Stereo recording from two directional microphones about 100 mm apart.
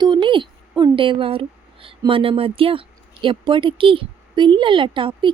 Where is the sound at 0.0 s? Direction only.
50° right (ahead or behind).